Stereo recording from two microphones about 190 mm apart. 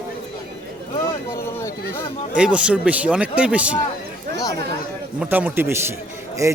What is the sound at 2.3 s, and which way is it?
Speech, 5° right (ahead or behind).